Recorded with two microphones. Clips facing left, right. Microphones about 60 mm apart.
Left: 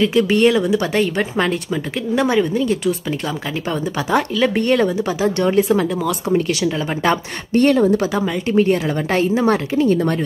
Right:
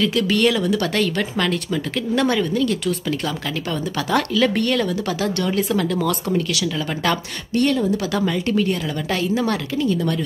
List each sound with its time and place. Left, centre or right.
0.0 s speech: left
4.1 s speech: left
6.3 s speech: left
8.1 s speech: centre
8.5 s speech: left